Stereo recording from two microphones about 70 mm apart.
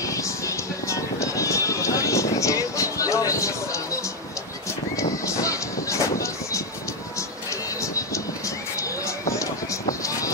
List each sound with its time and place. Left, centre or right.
0.0 s music: left
4.9 s horse: left
7.8 s vehicle: left
8.7 s a sound: left